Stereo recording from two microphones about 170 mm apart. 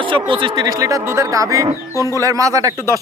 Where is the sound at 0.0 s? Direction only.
30° right (ahead or behind).